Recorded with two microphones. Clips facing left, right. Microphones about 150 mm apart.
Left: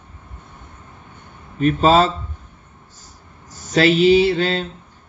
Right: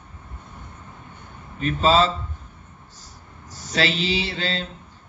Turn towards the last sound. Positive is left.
turn(degrees=50)  # may be behind; listen again after turning